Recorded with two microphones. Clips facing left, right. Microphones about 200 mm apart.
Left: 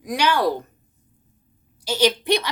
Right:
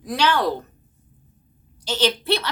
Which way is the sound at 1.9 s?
10° left (ahead or behind).